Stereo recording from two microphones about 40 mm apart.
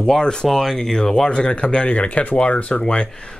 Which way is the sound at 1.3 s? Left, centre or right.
Left.